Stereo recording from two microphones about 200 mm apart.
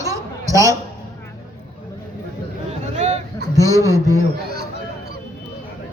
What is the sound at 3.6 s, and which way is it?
Speech, 15° right (ahead or behind).